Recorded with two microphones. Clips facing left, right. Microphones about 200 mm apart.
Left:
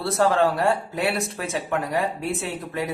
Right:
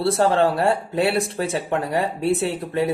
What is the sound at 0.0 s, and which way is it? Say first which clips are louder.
Speech: right 2 dB; 30° right (ahead or behind).